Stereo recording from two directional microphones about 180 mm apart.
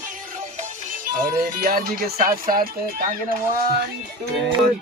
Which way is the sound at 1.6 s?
55° right (ahead or behind).